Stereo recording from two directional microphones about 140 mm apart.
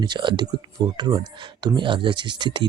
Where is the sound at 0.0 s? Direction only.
35° right (ahead or behind).